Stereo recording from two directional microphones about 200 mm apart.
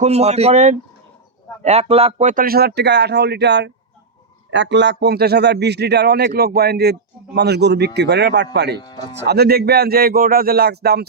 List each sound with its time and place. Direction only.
0.0 s a man's voice: 30° right (ahead or behind); by 11.0 s 55° right (ahead or behind)